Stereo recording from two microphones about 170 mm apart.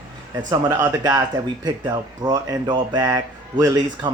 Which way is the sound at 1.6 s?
25° right (ahead or behind).